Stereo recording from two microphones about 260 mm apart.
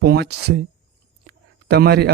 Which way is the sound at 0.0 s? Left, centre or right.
Right.